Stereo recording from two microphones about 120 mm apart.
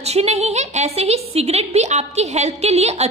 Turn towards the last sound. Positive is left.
turn(degrees=-65)  # may be behind; listen again after turning